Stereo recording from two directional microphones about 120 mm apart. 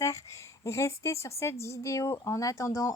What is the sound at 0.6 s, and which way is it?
Speech, 25° left (ahead or behind).